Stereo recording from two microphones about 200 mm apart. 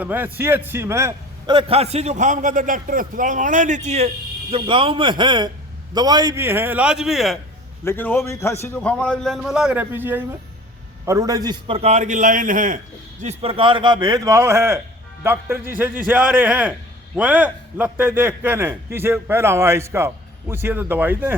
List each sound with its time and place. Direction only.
0.0 s a man's voice: 10° right (ahead or behind)
1.5 s a man's voice: 30° right (ahead or behind); by 7.3 s centre (ahead or behind)
7.9 s a man's voice: 10° left (ahead or behind); by 12.8 s 40° right (ahead or behind)
13.2 s a man's voice: 30° right (ahead or behind); by 21.3 s 10° right (ahead or behind)